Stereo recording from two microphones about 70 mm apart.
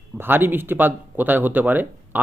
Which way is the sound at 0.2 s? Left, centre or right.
Right.